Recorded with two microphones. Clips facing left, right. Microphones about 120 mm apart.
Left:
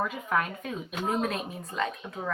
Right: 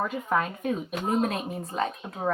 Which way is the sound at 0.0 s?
25° right (ahead or behind).